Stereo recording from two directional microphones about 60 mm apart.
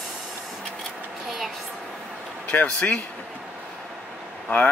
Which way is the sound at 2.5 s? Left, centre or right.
Left.